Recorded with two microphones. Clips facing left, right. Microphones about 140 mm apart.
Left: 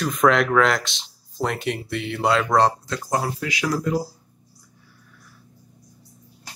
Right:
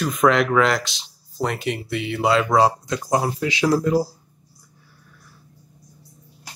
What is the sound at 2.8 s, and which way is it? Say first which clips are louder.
Speech: right 3 dB; 15° right (ahead or behind).